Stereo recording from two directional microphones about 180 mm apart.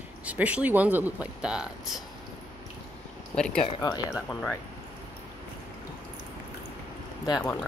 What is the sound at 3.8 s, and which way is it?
Speech, 25° left (ahead or behind).